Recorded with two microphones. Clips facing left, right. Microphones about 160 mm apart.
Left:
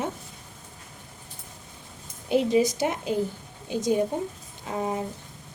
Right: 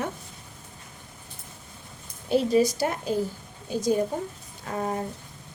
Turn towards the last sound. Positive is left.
turn(degrees=10)  # may be behind; listen again after turning